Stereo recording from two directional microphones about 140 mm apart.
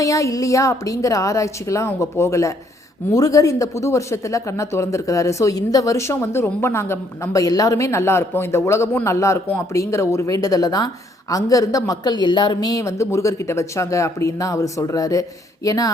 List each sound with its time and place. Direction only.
0.0 s speech: 25° left (ahead or behind)